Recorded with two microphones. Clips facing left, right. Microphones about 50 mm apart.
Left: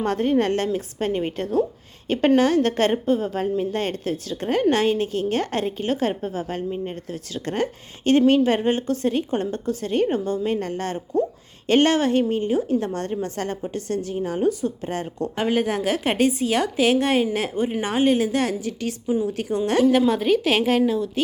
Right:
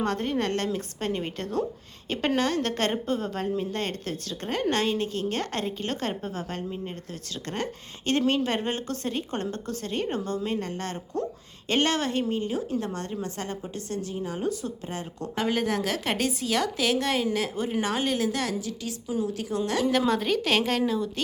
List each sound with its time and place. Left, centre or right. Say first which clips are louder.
0.0 s a woman's voice: left 6 dB; left
2.9 s a woman's voice: left 7 dB; centre; by 10.9 s left
10.9 s a woman's voice: left 8 dB; centre
11.7 s a woman's voice: left 7 dB; left
19.8 s a woman's voice: left 7 dB; centre